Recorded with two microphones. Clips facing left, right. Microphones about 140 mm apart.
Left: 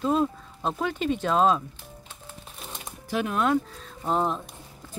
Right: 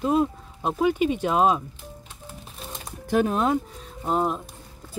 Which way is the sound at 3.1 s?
35° right (ahead or behind).